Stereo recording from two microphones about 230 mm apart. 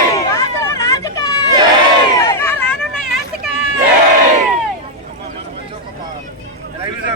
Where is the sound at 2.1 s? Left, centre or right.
Centre.